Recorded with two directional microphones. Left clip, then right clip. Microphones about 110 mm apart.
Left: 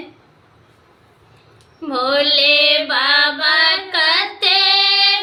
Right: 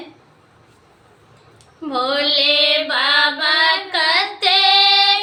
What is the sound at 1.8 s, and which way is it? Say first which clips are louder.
Female singing: left 2 dB; 30° left (ahead or behind).